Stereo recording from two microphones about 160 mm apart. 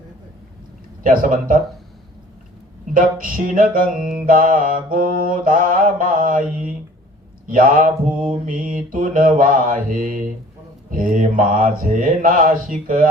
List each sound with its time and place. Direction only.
1.0 s mantra: 60° right (ahead or behind)
2.9 s mantra: 60° right (ahead or behind)
7.4 s speech: 60° right (ahead or behind)
8.4 s mantra: 60° right (ahead or behind)